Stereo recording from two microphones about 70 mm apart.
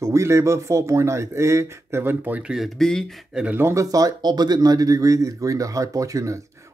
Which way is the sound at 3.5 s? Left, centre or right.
Right.